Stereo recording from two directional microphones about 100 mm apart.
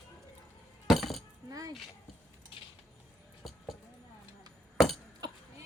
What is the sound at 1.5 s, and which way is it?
Speech, 35° right (ahead or behind).